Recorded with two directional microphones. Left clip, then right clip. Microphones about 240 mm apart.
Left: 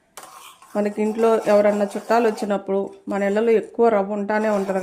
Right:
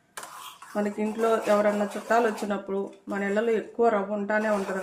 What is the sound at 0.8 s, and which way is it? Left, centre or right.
Speech, left.